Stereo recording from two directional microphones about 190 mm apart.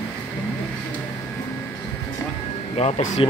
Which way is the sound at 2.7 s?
35° left (ahead or behind).